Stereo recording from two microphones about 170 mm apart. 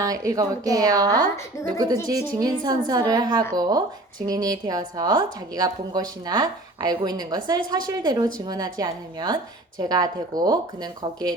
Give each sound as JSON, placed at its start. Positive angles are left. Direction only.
{"t": 0.0, "sound": "a woman's voice", "side_deg": -20}